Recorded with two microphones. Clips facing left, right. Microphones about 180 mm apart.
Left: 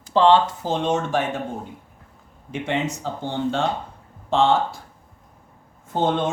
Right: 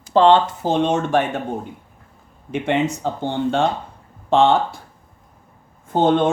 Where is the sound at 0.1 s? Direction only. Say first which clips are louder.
Right 2 dB; 55° right (ahead or behind).